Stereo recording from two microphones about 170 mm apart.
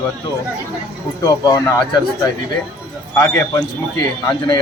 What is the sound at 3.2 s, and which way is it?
Speech, 20° left (ahead or behind).